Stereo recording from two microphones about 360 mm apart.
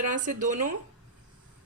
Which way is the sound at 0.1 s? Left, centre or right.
Right.